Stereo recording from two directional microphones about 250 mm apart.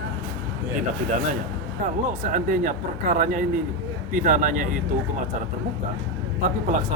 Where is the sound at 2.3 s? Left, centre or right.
Right.